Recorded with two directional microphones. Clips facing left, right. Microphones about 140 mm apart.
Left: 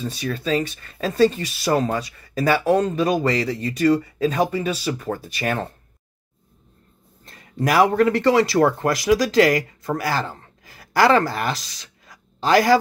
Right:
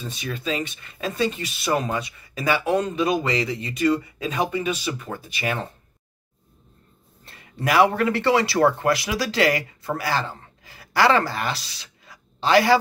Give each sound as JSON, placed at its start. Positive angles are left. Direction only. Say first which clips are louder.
{"t": 0.0, "sound": "speech", "louder": "left 4 dB", "side_deg": 40}
{"t": 7.2, "sound": "speech", "louder": "left 3 dB", "side_deg": 45}